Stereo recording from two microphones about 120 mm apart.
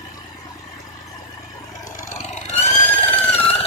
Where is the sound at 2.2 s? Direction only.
75° left (ahead or behind).